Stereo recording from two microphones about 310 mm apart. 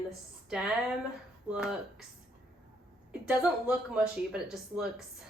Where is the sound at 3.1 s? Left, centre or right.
Centre.